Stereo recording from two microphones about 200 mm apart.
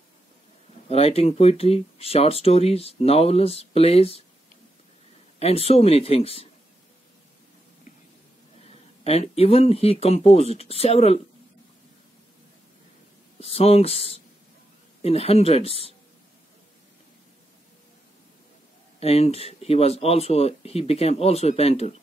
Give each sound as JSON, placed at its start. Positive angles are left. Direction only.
{"t": 0.8, "sound": "speech", "side_deg": 30}
{"t": 5.4, "sound": "speech", "side_deg": 30}
{"t": 9.0, "sound": "speech", "side_deg": 30}
{"t": 13.4, "sound": "speech", "side_deg": 30}
{"t": 18.9, "sound": "speech", "side_deg": 30}